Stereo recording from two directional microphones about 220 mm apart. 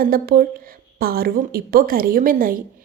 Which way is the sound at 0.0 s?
40° right (ahead or behind).